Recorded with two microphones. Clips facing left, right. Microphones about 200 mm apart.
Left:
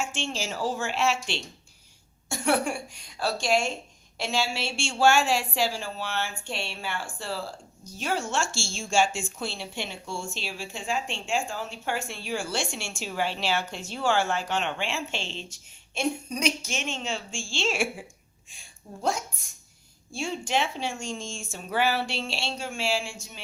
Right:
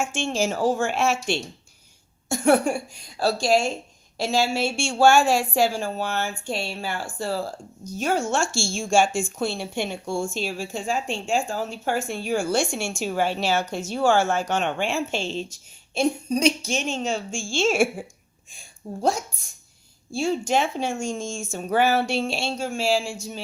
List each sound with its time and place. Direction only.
0.0 s speech: 50° right (ahead or behind)
20.1 s speech: 40° right (ahead or behind)